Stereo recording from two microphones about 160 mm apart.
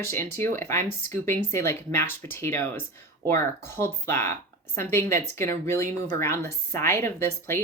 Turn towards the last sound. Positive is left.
turn(degrees=15)  # may be behind; listen again after turning